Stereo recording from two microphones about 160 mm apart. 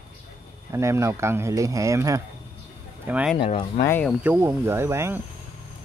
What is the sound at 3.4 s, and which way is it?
Speech, 35° left (ahead or behind).